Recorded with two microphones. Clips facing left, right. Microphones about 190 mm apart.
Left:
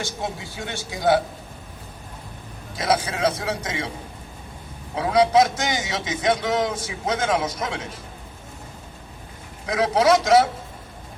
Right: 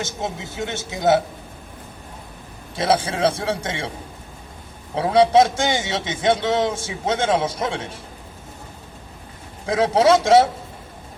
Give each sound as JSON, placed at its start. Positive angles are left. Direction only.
{"t": 0.0, "sound": "a man's voice", "side_deg": -20}
{"t": 2.7, "sound": "a man's voice", "side_deg": -30}
{"t": 4.9, "sound": "a man's voice", "side_deg": -30}
{"t": 9.6, "sound": "a man's voice", "side_deg": -30}